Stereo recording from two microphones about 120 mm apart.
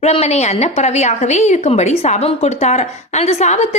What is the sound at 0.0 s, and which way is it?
A woman's voice, 65° left (ahead or behind).